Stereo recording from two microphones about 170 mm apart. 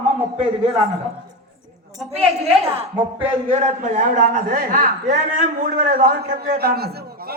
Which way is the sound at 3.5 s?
45° right (ahead or behind).